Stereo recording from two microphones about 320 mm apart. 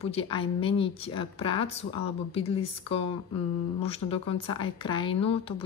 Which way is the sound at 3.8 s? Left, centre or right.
Centre.